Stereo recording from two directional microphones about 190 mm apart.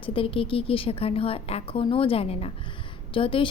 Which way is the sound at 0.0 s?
30° left (ahead or behind).